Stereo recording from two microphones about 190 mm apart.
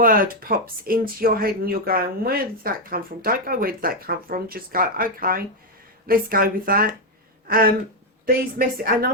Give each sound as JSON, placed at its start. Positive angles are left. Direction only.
{"t": 0.0, "sound": "speech", "side_deg": -45}